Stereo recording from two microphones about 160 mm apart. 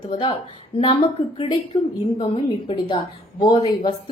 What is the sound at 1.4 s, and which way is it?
A woman's voice, 25° left (ahead or behind).